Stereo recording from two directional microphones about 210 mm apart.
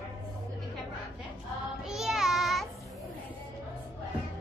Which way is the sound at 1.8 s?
Centre (ahead or behind).